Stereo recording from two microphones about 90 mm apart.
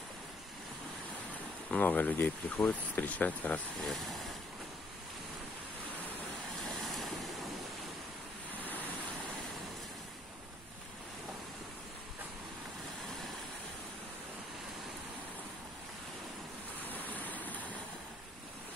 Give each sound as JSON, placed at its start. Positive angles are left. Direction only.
{"t": 1.7, "sound": "speech", "side_deg": 15}
{"t": 3.7, "sound": "speech", "side_deg": 0}
{"t": 6.5, "sound": "waves", "side_deg": 0}
{"t": 8.6, "sound": "waves", "side_deg": 20}
{"t": 16.9, "sound": "vehicle", "side_deg": 20}